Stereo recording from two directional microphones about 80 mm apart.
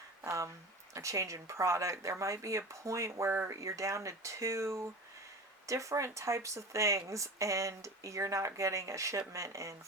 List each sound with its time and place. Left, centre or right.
0.3 s speech: right